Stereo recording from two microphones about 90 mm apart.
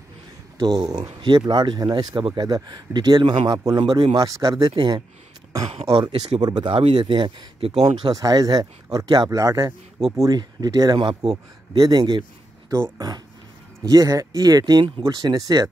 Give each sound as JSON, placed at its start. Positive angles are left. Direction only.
{"t": 0.6, "sound": "speech", "side_deg": -55}
{"t": 5.7, "sound": "speech", "side_deg": -75}
{"t": 6.0, "sound": "speech", "side_deg": -55}
{"t": 7.8, "sound": "speech", "side_deg": -45}
{"t": 11.7, "sound": "speech", "side_deg": -50}
{"t": 12.7, "sound": "speech", "side_deg": -35}